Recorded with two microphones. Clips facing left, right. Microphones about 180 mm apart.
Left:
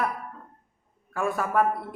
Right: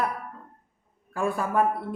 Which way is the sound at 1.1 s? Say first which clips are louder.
Even; 30° right (ahead or behind).